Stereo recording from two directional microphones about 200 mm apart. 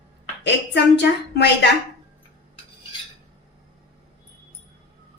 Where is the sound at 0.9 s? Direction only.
60° left (ahead or behind).